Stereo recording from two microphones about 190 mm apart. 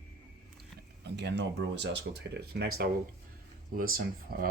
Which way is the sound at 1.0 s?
65° right (ahead or behind).